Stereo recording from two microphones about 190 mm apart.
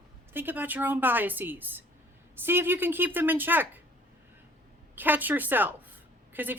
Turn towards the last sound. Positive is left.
turn(degrees=-10)  # may be behind; listen again after turning